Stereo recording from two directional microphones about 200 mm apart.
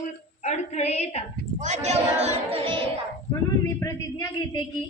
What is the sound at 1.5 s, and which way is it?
Speech, 35° right (ahead or behind).